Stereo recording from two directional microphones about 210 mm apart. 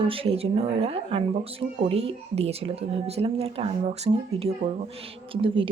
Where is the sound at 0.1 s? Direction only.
25° right (ahead or behind).